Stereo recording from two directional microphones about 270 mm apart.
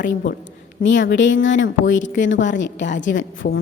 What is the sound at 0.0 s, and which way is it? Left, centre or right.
A woman's voice, left.